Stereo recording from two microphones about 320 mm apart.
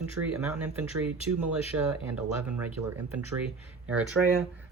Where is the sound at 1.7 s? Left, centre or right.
Right.